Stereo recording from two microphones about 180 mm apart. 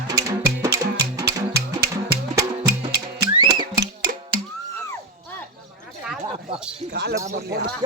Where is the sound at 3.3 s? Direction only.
25° right (ahead or behind).